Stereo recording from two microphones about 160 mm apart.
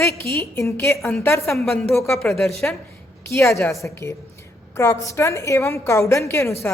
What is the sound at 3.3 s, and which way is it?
Speech, 15° left (ahead or behind).